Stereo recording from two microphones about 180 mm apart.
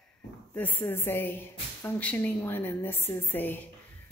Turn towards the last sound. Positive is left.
turn(degrees=10)  # may be behind; listen again after turning